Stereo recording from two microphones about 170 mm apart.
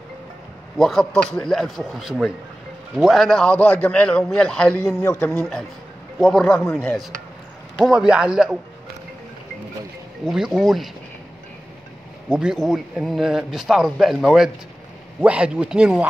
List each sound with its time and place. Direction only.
0.7 s a man's voice: centre (ahead or behind)
5.0 s speech: 20° left (ahead or behind)
6.1 s a man's voice: 5° left (ahead or behind)
10.2 s a man's voice: centre (ahead or behind)
12.4 s a man's voice: 5° right (ahead or behind)